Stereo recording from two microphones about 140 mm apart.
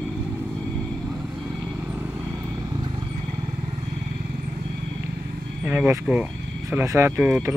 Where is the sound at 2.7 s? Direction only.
35° right (ahead or behind).